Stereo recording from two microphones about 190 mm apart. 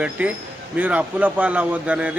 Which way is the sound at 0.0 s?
5° right (ahead or behind).